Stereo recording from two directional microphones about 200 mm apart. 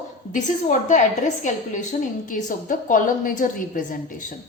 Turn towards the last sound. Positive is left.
turn(degrees=40)  # may be behind; listen again after turning